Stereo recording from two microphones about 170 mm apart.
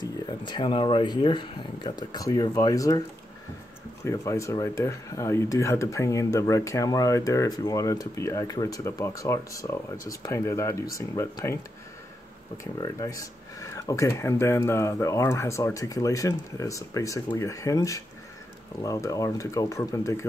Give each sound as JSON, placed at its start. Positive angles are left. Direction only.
{"t": 0.0, "sound": "speech", "side_deg": 25}
{"t": 4.0, "sound": "speech", "side_deg": 15}
{"t": 12.7, "sound": "speech", "side_deg": 20}